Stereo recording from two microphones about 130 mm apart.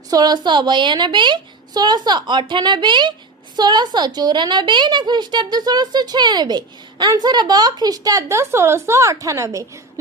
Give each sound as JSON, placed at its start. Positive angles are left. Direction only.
{"t": 0.1, "sound": "a woman's voice", "side_deg": -30}